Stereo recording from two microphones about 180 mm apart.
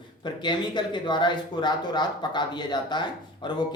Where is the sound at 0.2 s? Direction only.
25° left (ahead or behind).